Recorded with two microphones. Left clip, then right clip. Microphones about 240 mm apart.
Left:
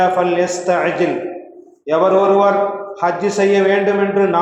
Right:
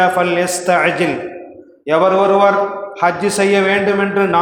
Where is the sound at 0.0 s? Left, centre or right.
Right.